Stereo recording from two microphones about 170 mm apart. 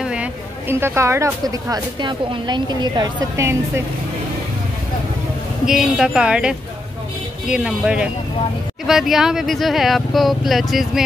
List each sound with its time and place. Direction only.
0.0 s speech: 5° right (ahead or behind)
5.7 s speech: 5° right (ahead or behind)